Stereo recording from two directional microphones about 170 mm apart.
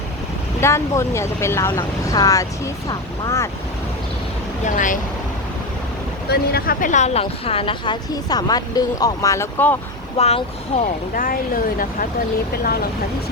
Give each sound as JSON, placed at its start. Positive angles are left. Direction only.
{"t": 0.6, "sound": "speech", "side_deg": 15}
{"t": 4.6, "sound": "speech", "side_deg": 50}
{"t": 6.2, "sound": "speech", "side_deg": 70}
{"t": 10.2, "sound": "speech", "side_deg": 40}
{"t": 11.1, "sound": "speech", "side_deg": 55}